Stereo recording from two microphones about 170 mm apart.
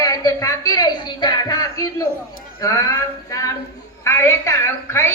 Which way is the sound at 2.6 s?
20° left (ahead or behind).